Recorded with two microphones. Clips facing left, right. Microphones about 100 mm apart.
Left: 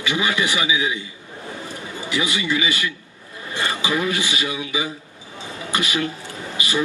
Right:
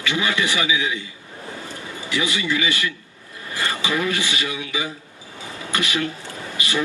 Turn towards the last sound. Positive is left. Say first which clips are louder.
# left 1 dB
turn(degrees=20)  # may be behind; listen again after turning